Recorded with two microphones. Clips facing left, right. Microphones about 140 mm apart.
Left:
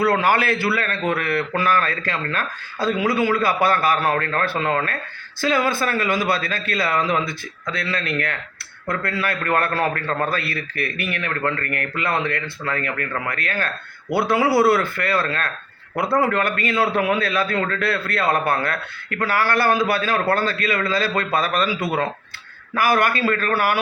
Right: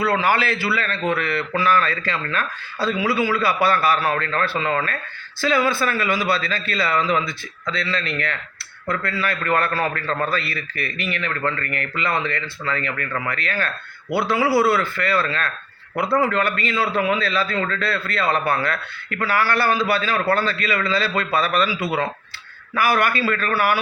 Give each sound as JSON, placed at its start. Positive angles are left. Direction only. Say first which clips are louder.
{"t": 0.2, "sound": "a man's voice", "louder": "left 1 dB", "side_deg": 50}
{"t": 5.4, "sound": "a man's voice", "louder": "even", "side_deg": 45}